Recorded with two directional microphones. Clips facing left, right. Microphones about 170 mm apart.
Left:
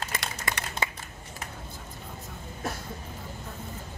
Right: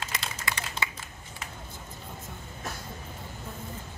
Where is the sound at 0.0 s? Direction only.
45° left (ahead or behind).